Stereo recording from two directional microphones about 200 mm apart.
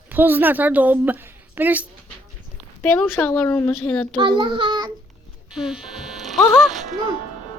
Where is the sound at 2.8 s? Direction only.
10° left (ahead or behind).